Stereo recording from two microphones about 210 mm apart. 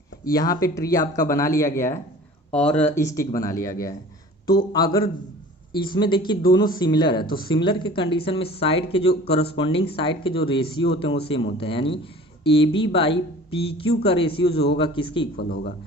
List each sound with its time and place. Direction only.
0.3 s speech: 15° left (ahead or behind)
15.4 s speech: 45° left (ahead or behind)